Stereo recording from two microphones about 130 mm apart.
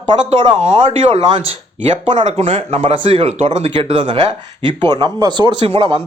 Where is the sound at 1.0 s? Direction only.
50° right (ahead or behind).